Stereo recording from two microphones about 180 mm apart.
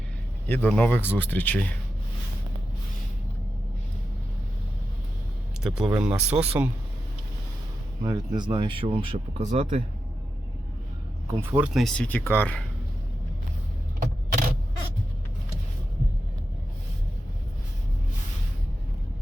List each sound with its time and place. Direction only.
0.4 s speech: 10° left (ahead or behind)
5.6 s speech: 5° right (ahead or behind)
6.1 s speech: 35° right (ahead or behind)
6.3 s speech: 10° right (ahead or behind)
8.0 s speech: 25° right (ahead or behind); by 9.8 s 45° right (ahead or behind)
11.3 s speech: 10° right (ahead or behind); by 12.6 s 10° left (ahead or behind)
14.0 s single-lens reflex camera: 50° right (ahead or behind)